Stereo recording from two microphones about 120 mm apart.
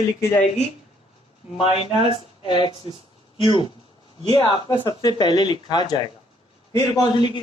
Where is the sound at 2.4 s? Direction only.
40° left (ahead or behind).